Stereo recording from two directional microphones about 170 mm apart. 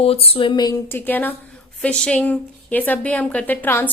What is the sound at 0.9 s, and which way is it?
Speech, 10° left (ahead or behind).